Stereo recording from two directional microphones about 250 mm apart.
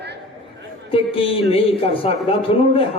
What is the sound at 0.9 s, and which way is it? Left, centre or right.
A man's voice, left.